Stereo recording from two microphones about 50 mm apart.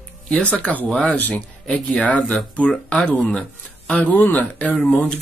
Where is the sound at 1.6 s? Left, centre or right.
Centre.